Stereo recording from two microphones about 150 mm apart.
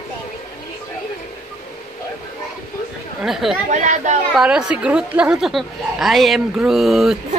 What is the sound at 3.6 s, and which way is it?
Speech, 55° right (ahead or behind).